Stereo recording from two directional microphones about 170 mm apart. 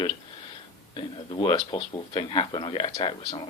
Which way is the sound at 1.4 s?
30° left (ahead or behind).